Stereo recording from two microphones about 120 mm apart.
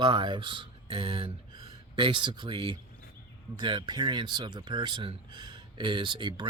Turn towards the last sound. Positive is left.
turn(degrees=-40)  # may be behind; listen again after turning